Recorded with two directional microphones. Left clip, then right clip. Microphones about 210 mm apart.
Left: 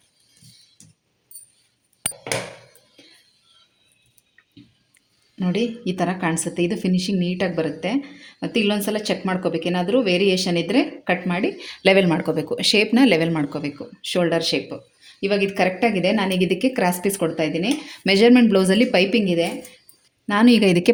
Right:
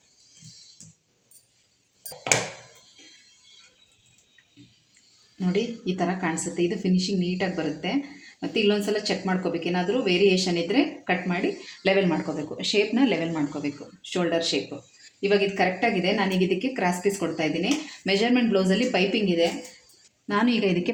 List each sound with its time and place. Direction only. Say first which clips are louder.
5.4 s speech: left 3 dB; 60° left (ahead or behind)